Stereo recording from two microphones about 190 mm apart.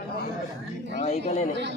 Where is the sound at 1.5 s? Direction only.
65° right (ahead or behind).